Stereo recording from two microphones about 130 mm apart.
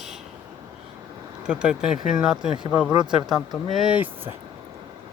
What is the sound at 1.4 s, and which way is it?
Speech, 5° right (ahead or behind).